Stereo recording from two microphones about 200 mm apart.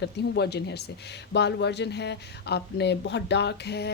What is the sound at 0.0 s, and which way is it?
Speech, 55° left (ahead or behind).